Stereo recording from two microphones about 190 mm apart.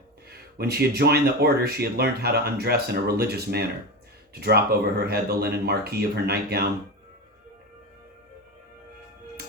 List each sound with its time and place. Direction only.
0.3 s speech: 55° right (ahead or behind)